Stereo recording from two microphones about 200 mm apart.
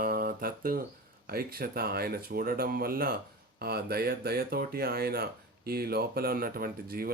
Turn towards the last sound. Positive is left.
turn(degrees=-50)  # may be behind; listen again after turning